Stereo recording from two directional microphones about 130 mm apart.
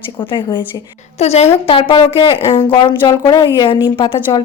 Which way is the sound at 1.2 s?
55° left (ahead or behind).